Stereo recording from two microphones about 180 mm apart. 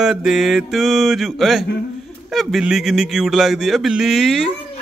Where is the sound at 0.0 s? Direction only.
Centre (ahead or behind).